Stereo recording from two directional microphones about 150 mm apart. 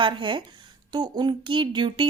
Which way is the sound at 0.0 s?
35° right (ahead or behind).